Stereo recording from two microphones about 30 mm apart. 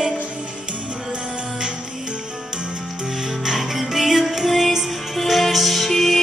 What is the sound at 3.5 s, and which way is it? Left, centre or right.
Music, centre.